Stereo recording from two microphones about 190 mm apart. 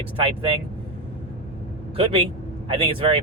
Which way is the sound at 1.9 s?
30° right (ahead or behind).